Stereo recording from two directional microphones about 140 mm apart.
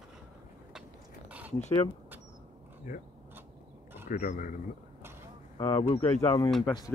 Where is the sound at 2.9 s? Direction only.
75° left (ahead or behind).